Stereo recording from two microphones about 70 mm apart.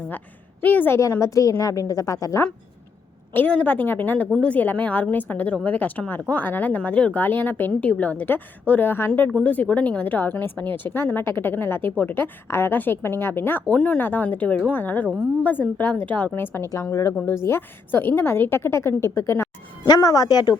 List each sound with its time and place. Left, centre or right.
0.6 s speech: left
1.2 s a woman's voice: left
3.3 s a woman's voice: centre
13.7 s speech: centre; by 16.6 s left
16.9 s a woman's voice: left
19.9 s speech: left